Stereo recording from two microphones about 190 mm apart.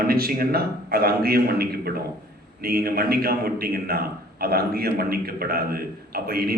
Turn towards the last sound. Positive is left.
turn(degrees=-55)  # may be behind; listen again after turning